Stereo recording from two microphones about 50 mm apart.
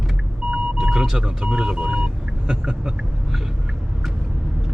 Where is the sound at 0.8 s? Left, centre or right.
Centre.